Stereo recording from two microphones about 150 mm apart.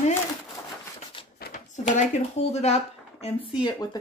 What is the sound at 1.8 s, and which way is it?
Speech, 50° left (ahead or behind).